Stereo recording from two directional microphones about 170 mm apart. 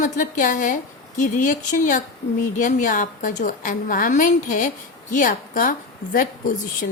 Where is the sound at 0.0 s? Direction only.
50° left (ahead or behind).